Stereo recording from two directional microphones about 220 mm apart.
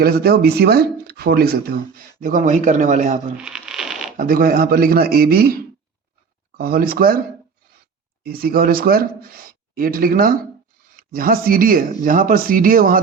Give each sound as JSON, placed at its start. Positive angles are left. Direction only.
{"t": 0.0, "sound": "speech", "side_deg": -45}
{"t": 3.3, "sound": "a sound", "side_deg": -5}
{"t": 4.2, "sound": "speech", "side_deg": -40}
{"t": 6.6, "sound": "speech", "side_deg": -45}
{"t": 8.2, "sound": "speech", "side_deg": -45}